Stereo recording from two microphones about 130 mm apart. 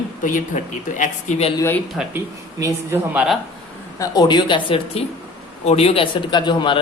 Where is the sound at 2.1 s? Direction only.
20° right (ahead or behind).